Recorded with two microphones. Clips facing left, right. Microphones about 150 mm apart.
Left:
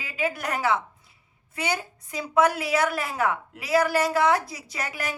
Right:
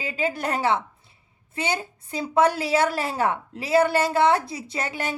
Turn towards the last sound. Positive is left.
turn(degrees=-25)  # may be behind; listen again after turning